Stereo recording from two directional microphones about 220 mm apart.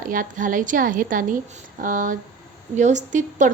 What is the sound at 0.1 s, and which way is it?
A woman's voice, 40° right (ahead or behind).